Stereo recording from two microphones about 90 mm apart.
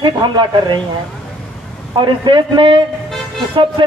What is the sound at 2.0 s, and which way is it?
Speech, 60° right (ahead or behind).